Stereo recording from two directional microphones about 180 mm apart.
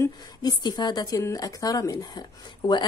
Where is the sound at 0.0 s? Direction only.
25° left (ahead or behind).